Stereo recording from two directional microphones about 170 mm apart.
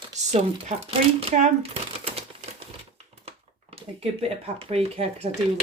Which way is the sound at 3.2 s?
35° right (ahead or behind).